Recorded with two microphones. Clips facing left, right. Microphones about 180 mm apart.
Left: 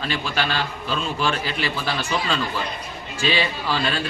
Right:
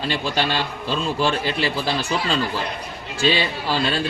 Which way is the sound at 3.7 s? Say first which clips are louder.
Right 4 dB; 35° right (ahead or behind).